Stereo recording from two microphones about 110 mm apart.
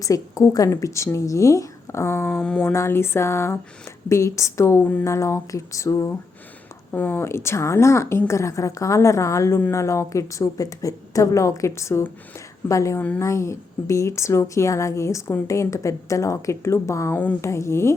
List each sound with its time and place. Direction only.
0.0 s a woman's voice: 30° left (ahead or behind)
2.3 s speech: 10° left (ahead or behind)
2.7 s a woman's voice: 25° left (ahead or behind)
6.9 s a woman's voice: 15° left (ahead or behind)